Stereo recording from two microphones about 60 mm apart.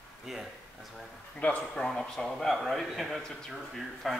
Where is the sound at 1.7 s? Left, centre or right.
Centre.